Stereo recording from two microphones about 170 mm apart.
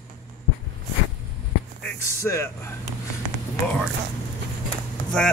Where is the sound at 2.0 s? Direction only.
15° left (ahead or behind).